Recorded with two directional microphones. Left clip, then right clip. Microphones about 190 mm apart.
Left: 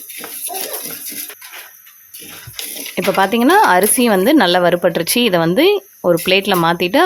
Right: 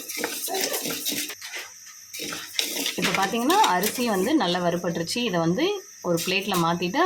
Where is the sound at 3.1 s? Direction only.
60° left (ahead or behind).